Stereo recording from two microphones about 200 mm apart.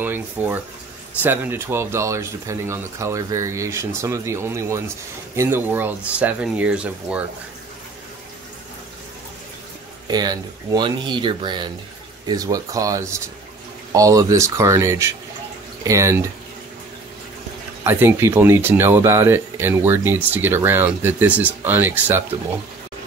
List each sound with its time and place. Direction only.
0.0 s speech: 10° right (ahead or behind)
10.0 s speech: 20° right (ahead or behind)
17.8 s speech: 10° right (ahead or behind)